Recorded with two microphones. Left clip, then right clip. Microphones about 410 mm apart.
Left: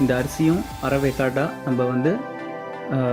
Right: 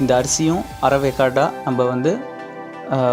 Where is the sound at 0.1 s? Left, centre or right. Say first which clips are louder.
Right 4 dB; centre.